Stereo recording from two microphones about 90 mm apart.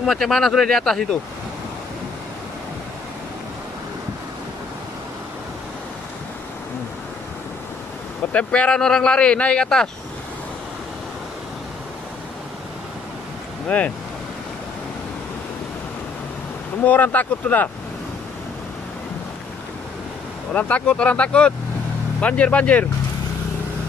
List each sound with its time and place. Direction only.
0.0 s speech: 5° left (ahead or behind)
8.3 s speech: 15° left (ahead or behind)
13.7 s speech: 15° left (ahead or behind)
16.8 s speech: 20° left (ahead or behind)
20.5 s speech: 15° left (ahead or behind)